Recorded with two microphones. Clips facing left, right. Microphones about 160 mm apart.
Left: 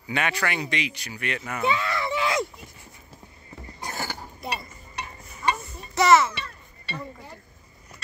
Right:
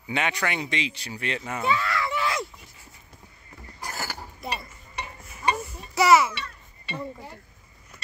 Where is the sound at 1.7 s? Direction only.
25° left (ahead or behind).